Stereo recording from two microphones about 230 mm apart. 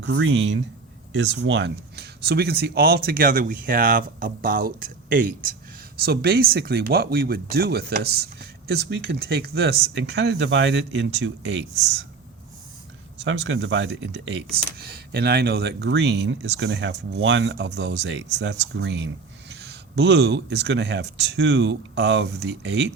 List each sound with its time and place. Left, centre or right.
0.0 s speech: right
13.2 s speech: right